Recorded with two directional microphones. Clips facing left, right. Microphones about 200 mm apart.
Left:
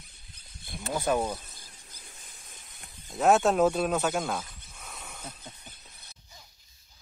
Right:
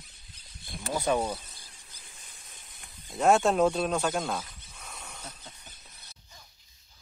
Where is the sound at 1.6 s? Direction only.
40° left (ahead or behind).